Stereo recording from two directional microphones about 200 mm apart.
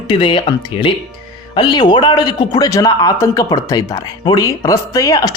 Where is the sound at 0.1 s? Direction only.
25° left (ahead or behind).